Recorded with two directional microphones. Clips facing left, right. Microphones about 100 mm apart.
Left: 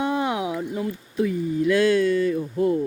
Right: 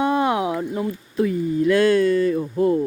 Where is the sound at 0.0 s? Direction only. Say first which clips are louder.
Right 4 dB; 60° right (ahead or behind); by 2.8 s 35° right (ahead or behind).